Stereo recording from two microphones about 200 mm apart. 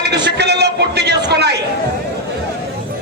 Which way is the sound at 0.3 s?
55° right (ahead or behind).